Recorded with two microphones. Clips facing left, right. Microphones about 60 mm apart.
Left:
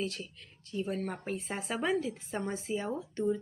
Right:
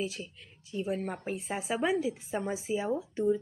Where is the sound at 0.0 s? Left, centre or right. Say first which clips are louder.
Right 1 dB; centre.